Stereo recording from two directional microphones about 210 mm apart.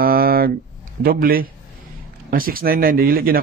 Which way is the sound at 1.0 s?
45° right (ahead or behind).